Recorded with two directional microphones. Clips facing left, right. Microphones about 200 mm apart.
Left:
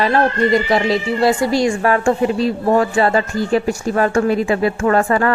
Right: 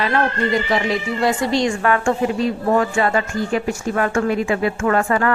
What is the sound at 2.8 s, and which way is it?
Speech, 35° left (ahead or behind).